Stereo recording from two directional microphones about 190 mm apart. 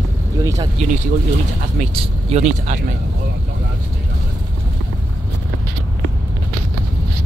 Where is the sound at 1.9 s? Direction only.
30° right (ahead or behind).